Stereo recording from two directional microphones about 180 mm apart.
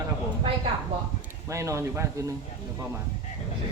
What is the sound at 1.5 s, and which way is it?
Speech, 15° right (ahead or behind).